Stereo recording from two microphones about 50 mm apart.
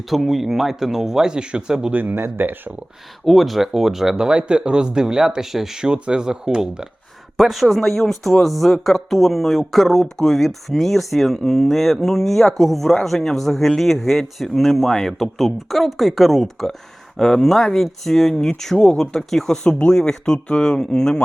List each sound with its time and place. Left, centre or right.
0.1 s speech: centre
1.9 s speech: right
3.2 s speech: centre
4.1 s speech: centre